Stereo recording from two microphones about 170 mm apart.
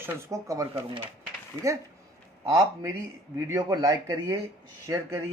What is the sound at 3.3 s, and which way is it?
Speech, 20° right (ahead or behind).